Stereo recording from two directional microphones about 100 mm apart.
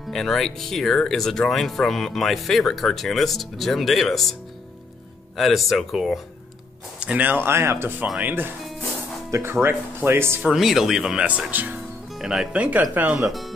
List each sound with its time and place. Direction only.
0.1 s speech: 5° left (ahead or behind)
5.4 s speech: centre (ahead or behind)
7.0 s speech: 15° right (ahead or behind)
10.5 s speech: 5° right (ahead or behind)
12.2 s speech: 5° right (ahead or behind)
12.9 s speech: 15° right (ahead or behind)